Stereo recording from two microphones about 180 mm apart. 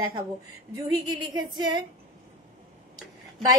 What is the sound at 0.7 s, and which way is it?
A woman's voice, 20° right (ahead or behind).